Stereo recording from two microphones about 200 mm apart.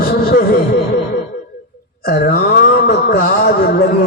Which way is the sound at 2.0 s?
50° left (ahead or behind).